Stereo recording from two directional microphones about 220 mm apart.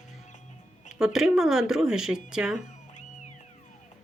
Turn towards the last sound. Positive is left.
turn(degrees=35)  # may be behind; listen again after turning